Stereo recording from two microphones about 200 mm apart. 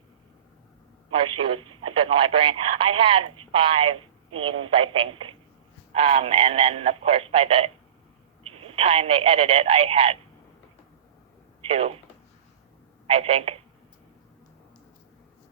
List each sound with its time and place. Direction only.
1.4 s speech: 25° right (ahead or behind)
11.6 s speech: 30° right (ahead or behind)
13.1 s speech: 30° right (ahead or behind)